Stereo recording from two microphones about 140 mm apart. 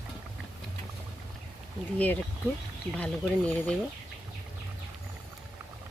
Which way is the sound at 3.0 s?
10° left (ahead or behind).